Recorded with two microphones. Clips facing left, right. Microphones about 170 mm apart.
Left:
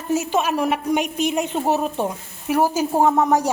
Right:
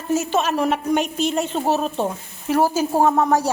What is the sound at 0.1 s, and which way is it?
A woman's voice, 15° left (ahead or behind).